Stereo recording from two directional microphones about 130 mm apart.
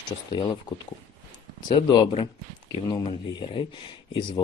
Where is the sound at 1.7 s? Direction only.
40° left (ahead or behind).